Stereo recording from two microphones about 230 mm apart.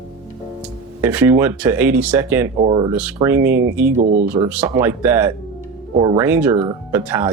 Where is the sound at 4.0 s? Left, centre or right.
Right.